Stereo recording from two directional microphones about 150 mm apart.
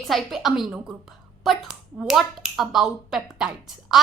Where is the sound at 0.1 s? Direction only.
Centre (ahead or behind).